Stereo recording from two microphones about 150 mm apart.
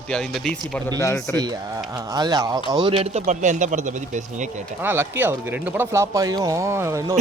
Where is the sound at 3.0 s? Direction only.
45° right (ahead or behind).